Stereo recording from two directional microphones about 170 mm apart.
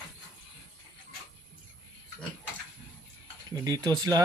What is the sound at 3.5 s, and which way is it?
Speech, 20° right (ahead or behind).